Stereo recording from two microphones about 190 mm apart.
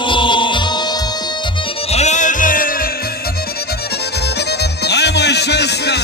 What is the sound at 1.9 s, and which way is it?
Music, 35° left (ahead or behind).